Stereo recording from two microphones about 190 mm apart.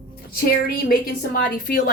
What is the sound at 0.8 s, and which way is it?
A woman's voice, 50° left (ahead or behind).